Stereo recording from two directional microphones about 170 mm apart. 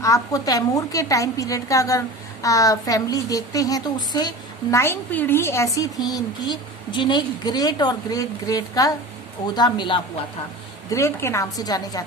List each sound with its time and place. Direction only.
0.0 s a woman's voice: 20° left (ahead or behind)
10.8 s a woman's voice: 15° left (ahead or behind)